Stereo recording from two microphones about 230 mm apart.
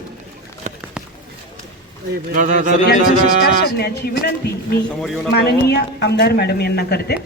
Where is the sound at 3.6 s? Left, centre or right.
Left.